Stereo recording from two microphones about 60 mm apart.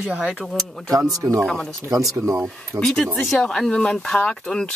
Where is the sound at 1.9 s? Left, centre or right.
Right.